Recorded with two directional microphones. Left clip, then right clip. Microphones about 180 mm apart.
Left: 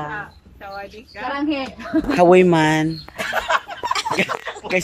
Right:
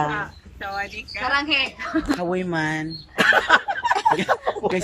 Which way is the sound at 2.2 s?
20° left (ahead or behind).